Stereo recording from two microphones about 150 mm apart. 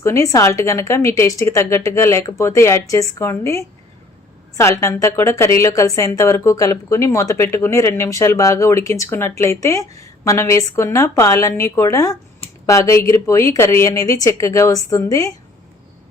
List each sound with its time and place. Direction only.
0.0 s a woman's voice: 20° left (ahead or behind)